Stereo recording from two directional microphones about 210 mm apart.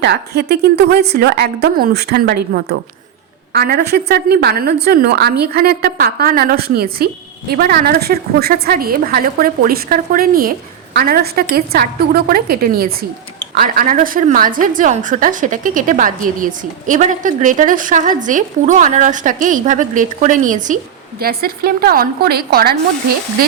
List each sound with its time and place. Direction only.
0.0 s a woman's voice: 50° right (ahead or behind)